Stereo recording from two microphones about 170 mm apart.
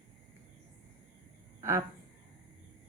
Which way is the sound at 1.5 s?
15° right (ahead or behind).